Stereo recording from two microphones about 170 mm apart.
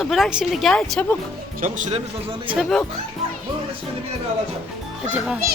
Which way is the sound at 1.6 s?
50° right (ahead or behind).